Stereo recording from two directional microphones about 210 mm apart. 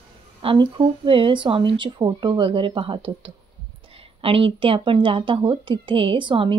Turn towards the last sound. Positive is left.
turn(degrees=-25)  # may be behind; listen again after turning